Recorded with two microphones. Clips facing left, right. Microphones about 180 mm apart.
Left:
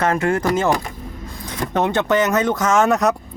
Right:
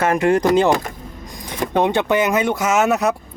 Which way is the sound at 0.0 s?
15° right (ahead or behind).